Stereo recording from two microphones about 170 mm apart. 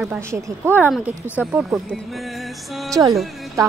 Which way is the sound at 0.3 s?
10° right (ahead or behind).